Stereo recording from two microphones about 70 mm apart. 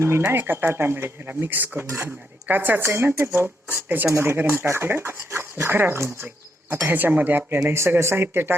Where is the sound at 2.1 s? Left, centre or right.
Right.